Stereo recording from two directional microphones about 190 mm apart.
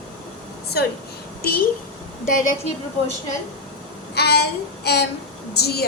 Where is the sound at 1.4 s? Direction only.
50° left (ahead or behind).